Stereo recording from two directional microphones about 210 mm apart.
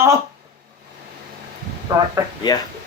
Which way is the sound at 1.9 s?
15° right (ahead or behind).